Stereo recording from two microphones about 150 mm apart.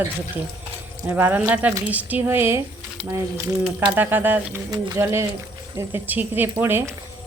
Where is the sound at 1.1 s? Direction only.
10° right (ahead or behind).